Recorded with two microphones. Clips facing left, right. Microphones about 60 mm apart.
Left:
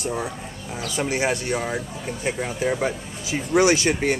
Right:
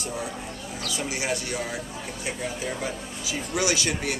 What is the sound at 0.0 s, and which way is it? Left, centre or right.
Speech, left.